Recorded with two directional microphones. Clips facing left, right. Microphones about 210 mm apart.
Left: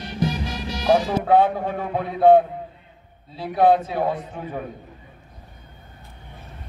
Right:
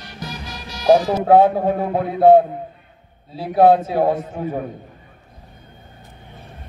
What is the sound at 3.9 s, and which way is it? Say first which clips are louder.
Speech: right 6 dB; 45° right (ahead or behind).